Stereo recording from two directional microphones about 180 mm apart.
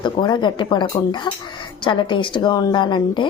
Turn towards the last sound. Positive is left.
turn(degrees=25)  # may be behind; listen again after turning